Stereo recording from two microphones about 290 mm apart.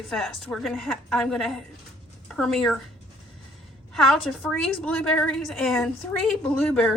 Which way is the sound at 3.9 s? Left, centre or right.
Centre.